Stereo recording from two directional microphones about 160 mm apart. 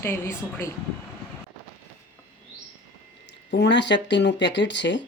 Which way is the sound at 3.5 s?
90° left.